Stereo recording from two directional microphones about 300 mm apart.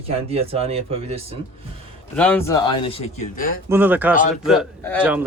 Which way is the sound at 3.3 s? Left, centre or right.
Left.